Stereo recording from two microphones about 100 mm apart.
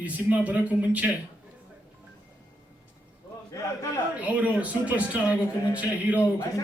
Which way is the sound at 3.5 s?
30° left (ahead or behind).